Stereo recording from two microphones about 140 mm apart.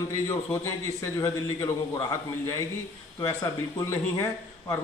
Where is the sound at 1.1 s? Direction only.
25° left (ahead or behind).